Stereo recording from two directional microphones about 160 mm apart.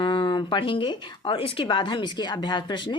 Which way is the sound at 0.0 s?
30° left (ahead or behind).